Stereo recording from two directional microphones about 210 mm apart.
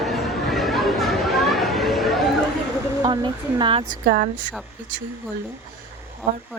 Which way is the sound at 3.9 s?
45° right (ahead or behind).